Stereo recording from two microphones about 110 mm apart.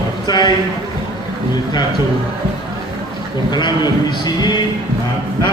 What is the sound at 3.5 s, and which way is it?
A man's voice, 40° left (ahead or behind).